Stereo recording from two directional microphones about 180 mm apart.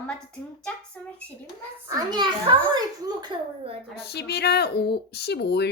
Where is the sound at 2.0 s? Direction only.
25° right (ahead or behind).